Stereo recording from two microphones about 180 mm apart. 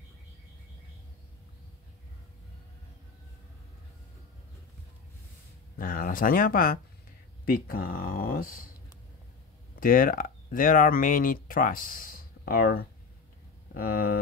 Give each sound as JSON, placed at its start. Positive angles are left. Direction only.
{"t": 5.8, "sound": "speech", "side_deg": 50}
{"t": 9.8, "sound": "speech", "side_deg": 50}